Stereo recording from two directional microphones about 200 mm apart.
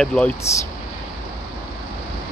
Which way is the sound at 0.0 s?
5° left (ahead or behind).